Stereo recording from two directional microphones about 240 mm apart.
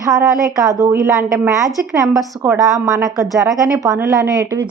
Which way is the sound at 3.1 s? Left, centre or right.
Centre.